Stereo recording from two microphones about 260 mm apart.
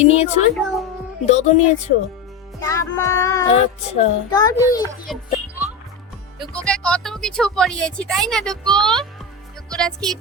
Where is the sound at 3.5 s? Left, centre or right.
Left.